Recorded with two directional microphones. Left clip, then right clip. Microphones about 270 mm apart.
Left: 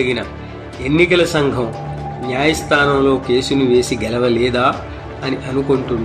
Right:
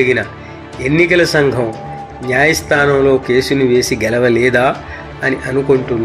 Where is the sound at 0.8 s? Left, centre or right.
Right.